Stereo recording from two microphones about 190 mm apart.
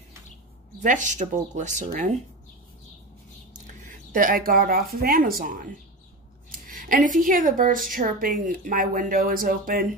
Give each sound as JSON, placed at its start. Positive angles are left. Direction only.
{"t": 0.7, "sound": "speech", "side_deg": -40}
{"t": 4.1, "sound": "speech", "side_deg": -45}